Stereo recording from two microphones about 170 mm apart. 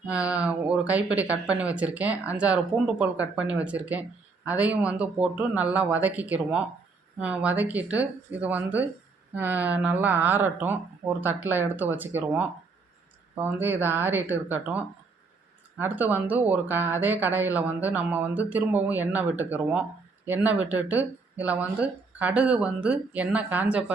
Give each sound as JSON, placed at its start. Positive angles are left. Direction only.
{"t": 0.1, "sound": "speech", "side_deg": -5}